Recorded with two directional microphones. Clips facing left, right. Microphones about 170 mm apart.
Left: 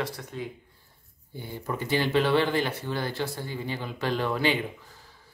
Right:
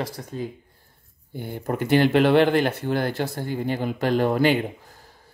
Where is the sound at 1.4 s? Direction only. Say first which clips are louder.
Right 6 dB; 55° right (ahead or behind).